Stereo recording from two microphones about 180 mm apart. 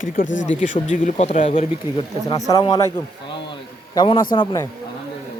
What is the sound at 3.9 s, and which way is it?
Speech, 25° left (ahead or behind).